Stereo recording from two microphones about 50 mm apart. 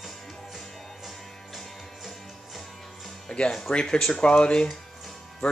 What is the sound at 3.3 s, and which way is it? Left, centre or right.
Music, centre.